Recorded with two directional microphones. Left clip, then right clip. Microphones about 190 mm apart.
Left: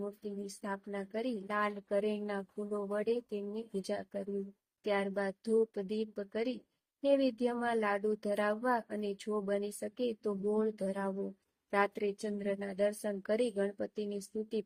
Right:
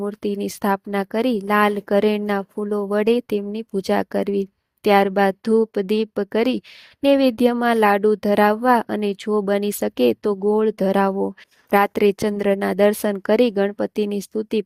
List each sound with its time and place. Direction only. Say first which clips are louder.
0.2 s speech: right 19 dB; 60° right (ahead or behind)